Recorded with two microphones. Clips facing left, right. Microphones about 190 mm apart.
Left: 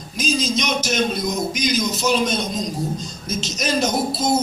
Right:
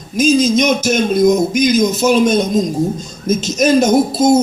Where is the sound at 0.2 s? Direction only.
50° right (ahead or behind).